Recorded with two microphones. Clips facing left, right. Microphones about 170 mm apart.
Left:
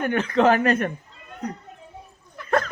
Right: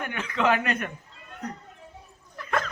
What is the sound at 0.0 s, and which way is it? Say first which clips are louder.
Speech: left 7 dB; 40° left (ahead or behind).